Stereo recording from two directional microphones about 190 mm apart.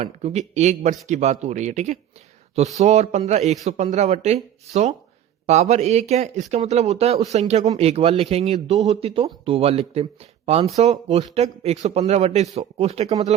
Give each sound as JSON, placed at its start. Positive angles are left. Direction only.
{"t": 0.0, "sound": "speech", "side_deg": -35}